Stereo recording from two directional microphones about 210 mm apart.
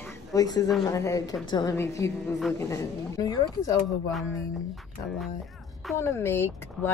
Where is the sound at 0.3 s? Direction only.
15° left (ahead or behind).